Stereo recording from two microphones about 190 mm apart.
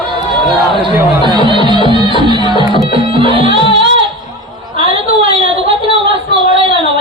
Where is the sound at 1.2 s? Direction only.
25° right (ahead or behind).